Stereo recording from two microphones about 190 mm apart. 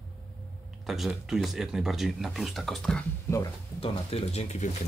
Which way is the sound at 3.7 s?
30° left (ahead or behind).